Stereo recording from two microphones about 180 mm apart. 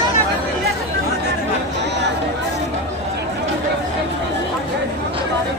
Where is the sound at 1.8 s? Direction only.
75° right (ahead or behind).